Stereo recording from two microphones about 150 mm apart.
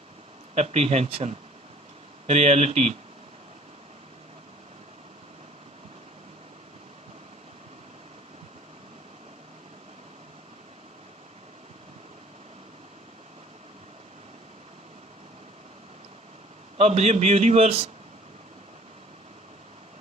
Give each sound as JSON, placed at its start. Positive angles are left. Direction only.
{"t": 0.5, "sound": "a man's voice", "side_deg": -45}
{"t": 16.7, "sound": "a man's voice", "side_deg": -45}